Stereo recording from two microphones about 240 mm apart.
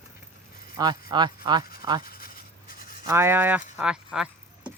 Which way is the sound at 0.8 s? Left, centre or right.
Centre.